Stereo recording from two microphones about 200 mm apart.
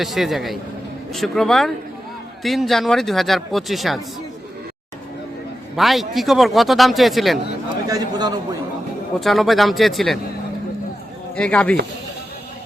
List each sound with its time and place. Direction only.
0.0 s speech: centre (ahead or behind)
5.7 s speech: centre (ahead or behind)
7.9 s a man's voice: 20° right (ahead or behind)
9.2 s speech: centre (ahead or behind)
11.3 s speech: 5° left (ahead or behind)